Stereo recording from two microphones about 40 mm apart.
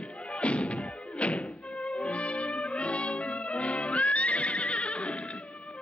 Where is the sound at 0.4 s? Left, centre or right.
Left.